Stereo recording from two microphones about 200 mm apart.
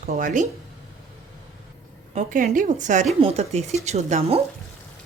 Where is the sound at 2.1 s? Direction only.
40° right (ahead or behind).